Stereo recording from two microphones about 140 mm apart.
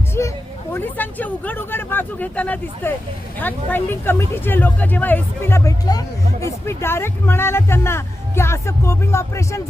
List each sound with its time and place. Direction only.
0.1 s speech: 20° left (ahead or behind)